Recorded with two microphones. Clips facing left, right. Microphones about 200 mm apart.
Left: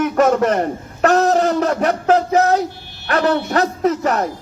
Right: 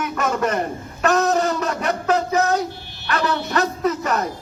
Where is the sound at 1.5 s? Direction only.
60° left (ahead or behind).